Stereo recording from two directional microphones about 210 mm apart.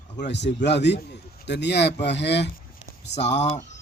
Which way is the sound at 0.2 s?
55° left (ahead or behind).